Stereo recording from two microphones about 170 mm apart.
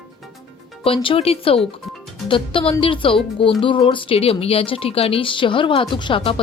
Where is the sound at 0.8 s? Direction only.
30° left (ahead or behind).